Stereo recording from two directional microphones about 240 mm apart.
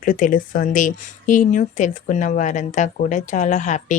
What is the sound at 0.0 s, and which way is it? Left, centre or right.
Speech, left.